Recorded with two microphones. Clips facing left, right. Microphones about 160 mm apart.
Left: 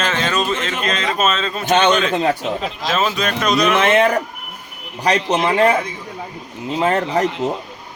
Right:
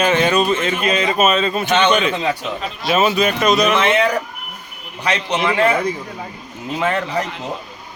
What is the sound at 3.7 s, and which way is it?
A man's voice, 45° left (ahead or behind).